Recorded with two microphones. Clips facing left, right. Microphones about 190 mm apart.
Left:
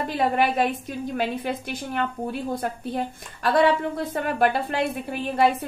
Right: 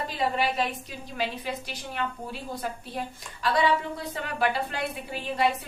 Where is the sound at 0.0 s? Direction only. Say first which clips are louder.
Left 5 dB; 55° left (ahead or behind).